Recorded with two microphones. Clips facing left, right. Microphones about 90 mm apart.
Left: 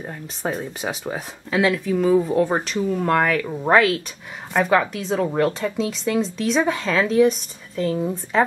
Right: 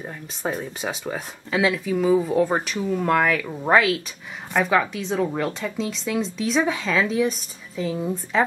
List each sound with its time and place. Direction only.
0.7 s speech: 5° left (ahead or behind)